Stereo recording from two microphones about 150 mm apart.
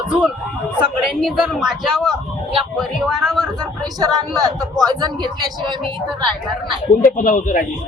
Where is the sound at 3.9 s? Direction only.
25° right (ahead or behind).